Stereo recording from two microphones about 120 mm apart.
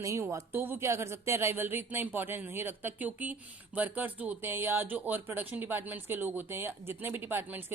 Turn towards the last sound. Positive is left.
turn(degrees=-20)  # may be behind; listen again after turning